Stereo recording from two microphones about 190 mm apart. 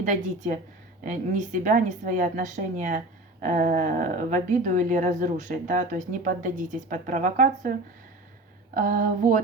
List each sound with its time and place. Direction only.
0.0 s speech: 40° right (ahead or behind)